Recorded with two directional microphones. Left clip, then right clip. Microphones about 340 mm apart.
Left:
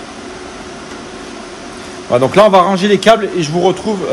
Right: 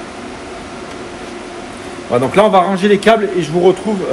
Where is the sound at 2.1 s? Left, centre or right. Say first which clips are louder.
Left 3 dB; left.